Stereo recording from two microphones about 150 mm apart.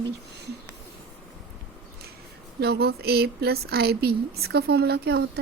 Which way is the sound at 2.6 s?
90° right.